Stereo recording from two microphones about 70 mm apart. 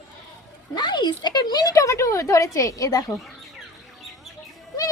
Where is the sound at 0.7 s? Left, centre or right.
Left.